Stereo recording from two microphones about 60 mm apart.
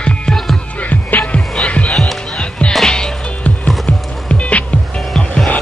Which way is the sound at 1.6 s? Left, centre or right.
Centre.